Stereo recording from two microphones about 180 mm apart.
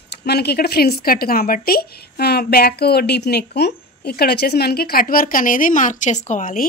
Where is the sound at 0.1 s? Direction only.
65° left (ahead or behind).